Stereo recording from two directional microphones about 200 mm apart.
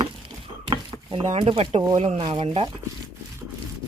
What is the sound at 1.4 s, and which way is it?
Speech, 30° right (ahead or behind).